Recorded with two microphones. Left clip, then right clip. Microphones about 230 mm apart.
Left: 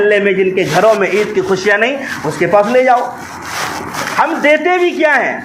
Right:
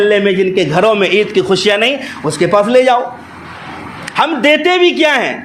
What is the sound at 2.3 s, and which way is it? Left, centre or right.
Speech, right.